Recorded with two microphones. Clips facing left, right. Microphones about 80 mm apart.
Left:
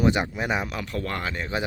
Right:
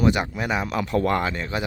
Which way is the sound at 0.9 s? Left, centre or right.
Centre.